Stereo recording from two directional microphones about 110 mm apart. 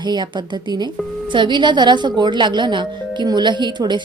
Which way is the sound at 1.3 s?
45° right (ahead or behind).